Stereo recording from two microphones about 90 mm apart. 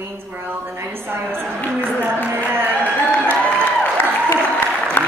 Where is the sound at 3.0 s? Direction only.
15° left (ahead or behind).